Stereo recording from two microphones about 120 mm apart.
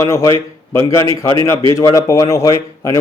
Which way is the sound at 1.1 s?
45° right (ahead or behind).